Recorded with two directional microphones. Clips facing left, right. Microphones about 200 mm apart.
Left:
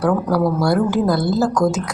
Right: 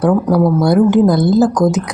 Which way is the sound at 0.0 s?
20° right (ahead or behind).